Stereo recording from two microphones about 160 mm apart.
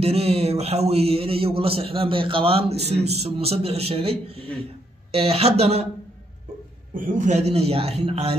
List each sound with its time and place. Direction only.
0.0 s a man's voice: 40° right (ahead or behind)
6.9 s a man's voice: 55° right (ahead or behind); by 8.4 s 40° right (ahead or behind)